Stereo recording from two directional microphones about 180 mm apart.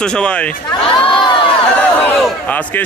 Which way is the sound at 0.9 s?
30° left (ahead or behind).